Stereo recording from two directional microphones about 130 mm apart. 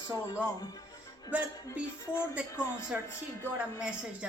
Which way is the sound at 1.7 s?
20° left (ahead or behind).